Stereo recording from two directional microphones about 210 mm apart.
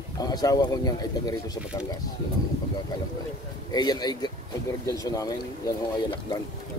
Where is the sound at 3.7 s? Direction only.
20° left (ahead or behind).